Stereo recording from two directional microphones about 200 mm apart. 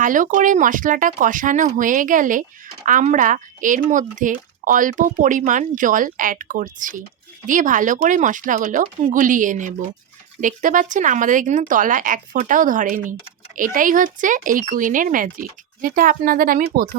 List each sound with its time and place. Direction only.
0.0 s speech: 40° right (ahead or behind)